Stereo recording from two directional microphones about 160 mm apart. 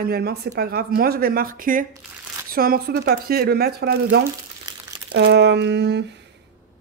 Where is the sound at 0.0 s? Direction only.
75° right (ahead or behind).